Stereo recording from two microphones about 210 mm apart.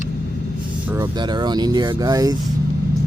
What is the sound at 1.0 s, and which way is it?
Speech, 20° right (ahead or behind).